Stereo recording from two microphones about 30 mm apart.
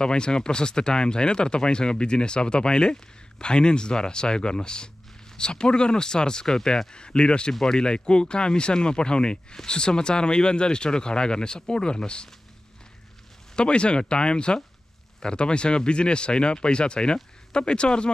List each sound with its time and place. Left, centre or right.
0.0 s speech: left
7.6 s speech: centre
7.9 s speech: left
13.6 s speech: left